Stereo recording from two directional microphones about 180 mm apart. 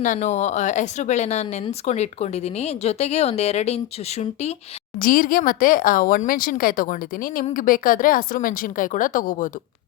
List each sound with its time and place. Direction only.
0.0 s speech: 45° left (ahead or behind)
4.9 s speech: 50° left (ahead or behind)